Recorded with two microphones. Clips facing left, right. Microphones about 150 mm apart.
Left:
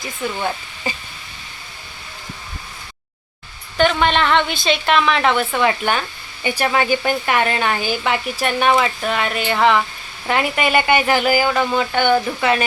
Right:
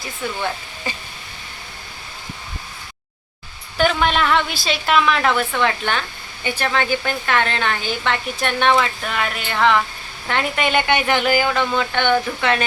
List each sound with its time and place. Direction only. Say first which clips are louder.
3.8 s a woman's voice: left 2 dB; 5° right (ahead or behind)